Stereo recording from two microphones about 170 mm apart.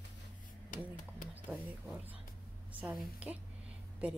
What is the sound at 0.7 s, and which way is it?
Speech, 50° left (ahead or behind).